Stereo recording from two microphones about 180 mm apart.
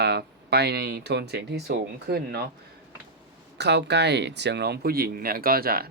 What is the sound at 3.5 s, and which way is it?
Speech, 70° right (ahead or behind).